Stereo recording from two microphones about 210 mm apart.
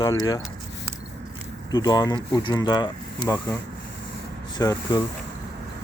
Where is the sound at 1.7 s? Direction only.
20° left (ahead or behind).